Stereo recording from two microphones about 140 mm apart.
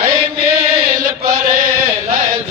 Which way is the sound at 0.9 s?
85° right.